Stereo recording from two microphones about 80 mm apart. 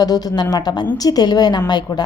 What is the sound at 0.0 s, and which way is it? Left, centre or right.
A woman's voice, left.